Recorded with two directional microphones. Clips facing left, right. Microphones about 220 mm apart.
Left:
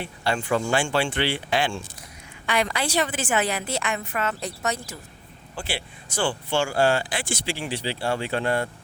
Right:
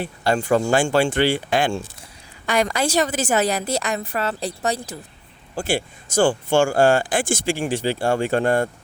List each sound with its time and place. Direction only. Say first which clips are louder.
0.0 s a woman's voice: right 5 dB; 40° right (ahead or behind)
5.5 s speech: right 9 dB; 45° right (ahead or behind)